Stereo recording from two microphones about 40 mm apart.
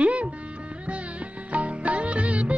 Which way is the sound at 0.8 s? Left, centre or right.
Right.